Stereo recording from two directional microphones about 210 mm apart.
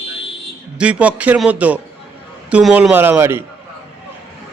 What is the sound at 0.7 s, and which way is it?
Speech, 5° right (ahead or behind).